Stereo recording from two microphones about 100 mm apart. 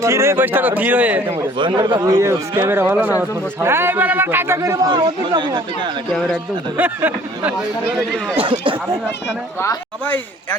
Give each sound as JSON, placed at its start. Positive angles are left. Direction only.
{"t": 0.0, "sound": "speech", "side_deg": -30}
{"t": 1.5, "sound": "speech", "side_deg": -50}
{"t": 2.0, "sound": "speech", "side_deg": -35}
{"t": 4.9, "sound": "speech", "side_deg": -45}
{"t": 6.1, "sound": "a man's voice", "side_deg": 5}
{"t": 6.7, "sound": "speech", "side_deg": -20}
{"t": 8.4, "sound": "speech", "side_deg": -55}